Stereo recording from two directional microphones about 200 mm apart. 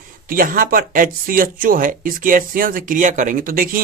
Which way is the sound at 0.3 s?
45° right (ahead or behind).